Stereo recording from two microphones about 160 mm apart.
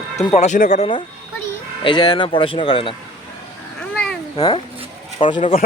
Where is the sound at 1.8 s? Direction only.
30° left (ahead or behind).